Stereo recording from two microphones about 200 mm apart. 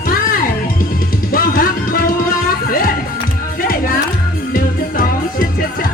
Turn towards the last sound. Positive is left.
turn(degrees=45)  # may be behind; listen again after turning